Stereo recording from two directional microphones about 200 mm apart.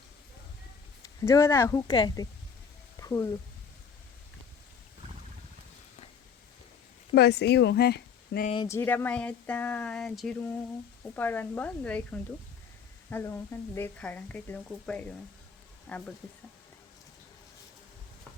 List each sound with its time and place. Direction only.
1.2 s a woman's voice: 15° left (ahead or behind)
3.0 s a sound: 15° left (ahead or behind)
7.1 s speech: 55° left (ahead or behind)
8.5 s a woman's voice: 15° left (ahead or behind)